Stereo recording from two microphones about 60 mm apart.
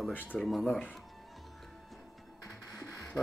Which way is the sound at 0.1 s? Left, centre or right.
Left.